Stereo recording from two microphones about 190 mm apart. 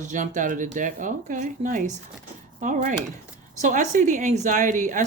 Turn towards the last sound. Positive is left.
turn(degrees=-40)  # may be behind; listen again after turning